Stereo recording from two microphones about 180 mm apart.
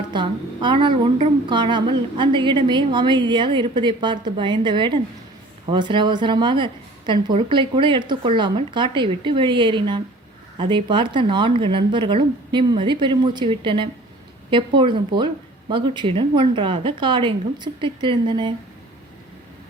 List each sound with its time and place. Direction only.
0.1 s a woman's voice: 25° right (ahead or behind)